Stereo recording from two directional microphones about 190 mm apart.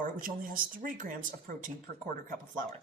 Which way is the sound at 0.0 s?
45° right (ahead or behind).